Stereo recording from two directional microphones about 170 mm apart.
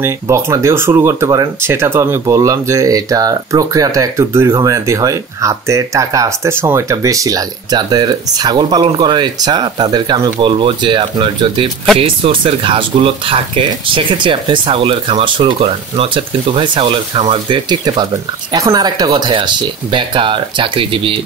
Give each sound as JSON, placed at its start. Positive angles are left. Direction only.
{"t": 0.0, "sound": "speech", "side_deg": -15}